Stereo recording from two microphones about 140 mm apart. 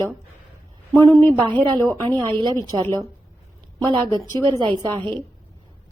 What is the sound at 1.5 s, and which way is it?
A woman's voice, 30° right (ahead or behind).